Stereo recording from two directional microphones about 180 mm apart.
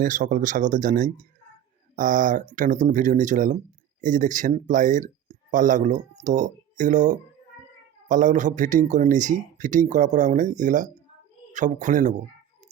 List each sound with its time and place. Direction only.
0.0 s speech: 45° right (ahead or behind)